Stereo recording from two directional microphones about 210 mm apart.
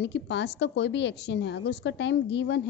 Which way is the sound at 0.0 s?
55° left (ahead or behind).